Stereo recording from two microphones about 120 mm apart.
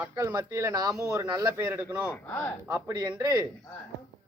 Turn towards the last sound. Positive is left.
turn(degrees=-35)  # may be behind; listen again after turning